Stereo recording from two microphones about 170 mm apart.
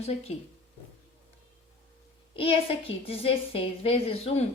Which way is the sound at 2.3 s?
35° left (ahead or behind).